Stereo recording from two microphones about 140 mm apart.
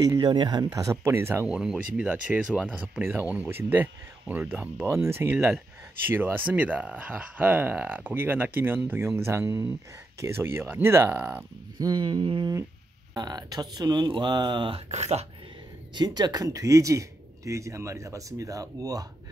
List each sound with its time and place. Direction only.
0.0 s a sound: 30° right (ahead or behind)
0.7 s speech: 20° right (ahead or behind)
1.5 s speech: 5° right (ahead or behind)
11.8 s a sound: 30° right (ahead or behind)
13.1 s speech: 30° right (ahead or behind)
14.9 s speech: 50° right (ahead or behind)
15.9 s speech: 30° right (ahead or behind)